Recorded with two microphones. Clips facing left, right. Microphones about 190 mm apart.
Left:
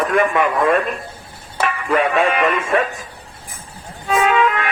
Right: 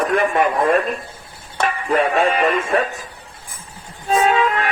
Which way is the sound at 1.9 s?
35° right (ahead or behind).